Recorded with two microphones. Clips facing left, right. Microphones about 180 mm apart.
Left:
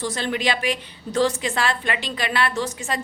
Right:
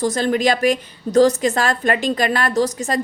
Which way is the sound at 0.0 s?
40° right (ahead or behind).